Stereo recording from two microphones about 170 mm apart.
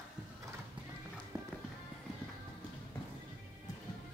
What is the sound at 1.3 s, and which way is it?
Music, 20° right (ahead or behind).